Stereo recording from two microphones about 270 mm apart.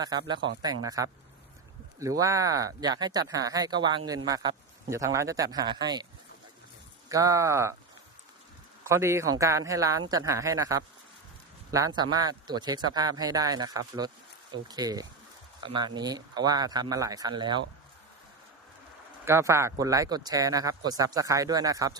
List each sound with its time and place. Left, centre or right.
0.0 s speech: centre
7.1 s speech: centre
8.8 s speech: centre
19.2 s speech: centre